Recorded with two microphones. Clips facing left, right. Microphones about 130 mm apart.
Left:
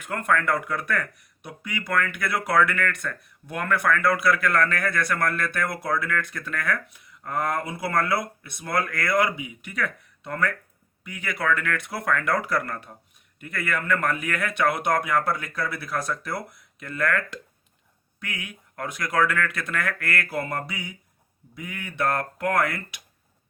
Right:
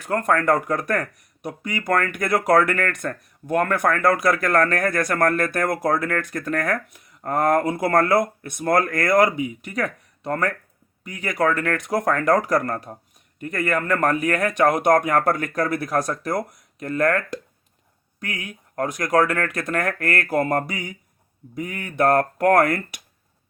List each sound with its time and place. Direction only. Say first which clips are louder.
0.0 s a man's voice: right 4 dB; 35° right (ahead or behind)